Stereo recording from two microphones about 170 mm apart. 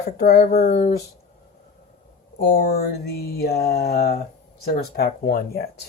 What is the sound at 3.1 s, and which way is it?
Speech, 65° left (ahead or behind).